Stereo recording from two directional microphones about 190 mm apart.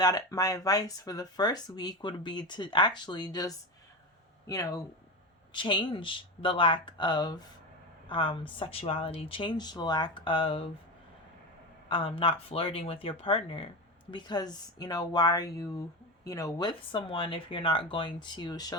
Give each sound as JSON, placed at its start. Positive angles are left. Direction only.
{"t": 0.0, "sound": "speech", "side_deg": 20}
{"t": 11.9, "sound": "speech", "side_deg": 30}